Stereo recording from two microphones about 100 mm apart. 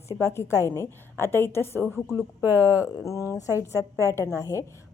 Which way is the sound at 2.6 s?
35° left (ahead or behind).